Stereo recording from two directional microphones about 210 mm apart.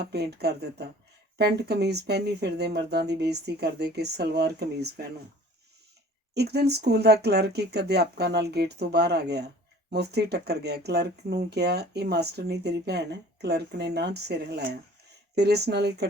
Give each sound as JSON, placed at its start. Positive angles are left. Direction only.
{"t": 0.0, "sound": "speech", "side_deg": -50}
{"t": 6.3, "sound": "speech", "side_deg": -50}